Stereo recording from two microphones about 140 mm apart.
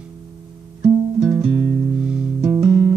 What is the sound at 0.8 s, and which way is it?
Music, 25° right (ahead or behind).